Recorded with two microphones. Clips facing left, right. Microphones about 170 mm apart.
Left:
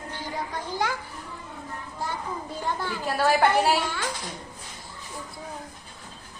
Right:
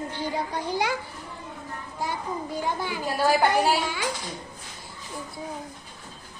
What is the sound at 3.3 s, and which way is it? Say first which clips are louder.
Speech: even; centre (ahead or behind).